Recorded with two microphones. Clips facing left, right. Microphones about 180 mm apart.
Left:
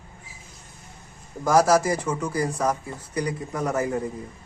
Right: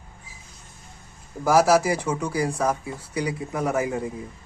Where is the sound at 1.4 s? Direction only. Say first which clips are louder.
Right 1 dB; 5° right (ahead or behind).